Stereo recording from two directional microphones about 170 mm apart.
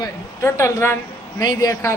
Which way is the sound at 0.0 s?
15° left (ahead or behind).